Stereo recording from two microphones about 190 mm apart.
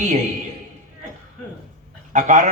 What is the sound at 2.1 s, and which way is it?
Speech, 40° right (ahead or behind).